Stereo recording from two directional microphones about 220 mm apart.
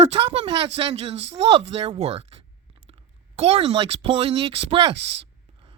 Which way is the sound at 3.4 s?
25° right (ahead or behind).